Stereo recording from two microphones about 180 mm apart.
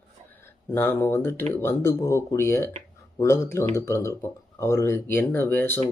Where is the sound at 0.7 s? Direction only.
10° left (ahead or behind).